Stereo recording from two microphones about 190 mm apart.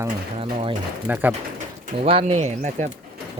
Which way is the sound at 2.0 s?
35° right (ahead or behind).